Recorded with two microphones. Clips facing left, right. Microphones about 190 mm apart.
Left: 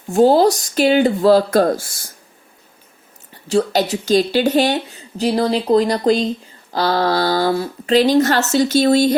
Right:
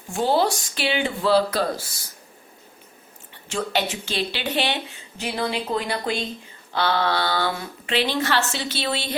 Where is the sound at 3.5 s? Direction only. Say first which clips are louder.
Left 9 dB; 35° left (ahead or behind).